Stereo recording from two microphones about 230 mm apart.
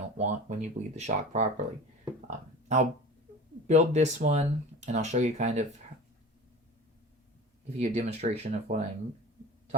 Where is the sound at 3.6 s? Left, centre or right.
Right.